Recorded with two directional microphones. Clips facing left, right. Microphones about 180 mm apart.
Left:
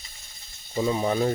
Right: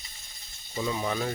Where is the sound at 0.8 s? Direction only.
30° left (ahead or behind).